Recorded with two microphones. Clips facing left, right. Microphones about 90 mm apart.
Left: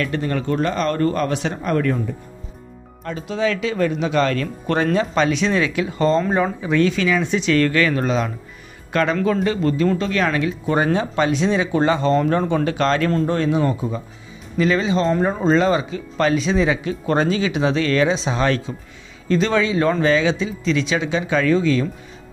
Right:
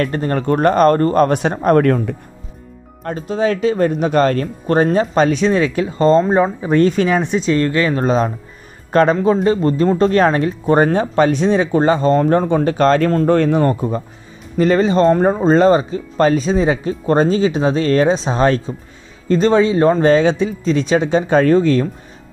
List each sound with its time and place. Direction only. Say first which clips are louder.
0.0 s speech: right 4 dB; 40° right (ahead or behind); by 2.1 s 55° right (ahead or behind)
3.0 s speech: right 4 dB; 40° right (ahead or behind)
7.5 s speech: even; 25° right (ahead or behind); by 21.8 s 45° right (ahead or behind)